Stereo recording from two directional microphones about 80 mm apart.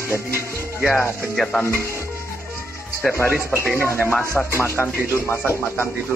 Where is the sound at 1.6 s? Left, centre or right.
Left.